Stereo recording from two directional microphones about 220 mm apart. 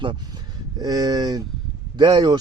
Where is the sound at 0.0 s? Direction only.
20° right (ahead or behind).